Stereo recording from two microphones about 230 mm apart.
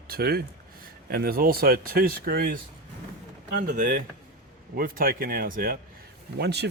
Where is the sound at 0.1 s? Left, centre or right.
Right.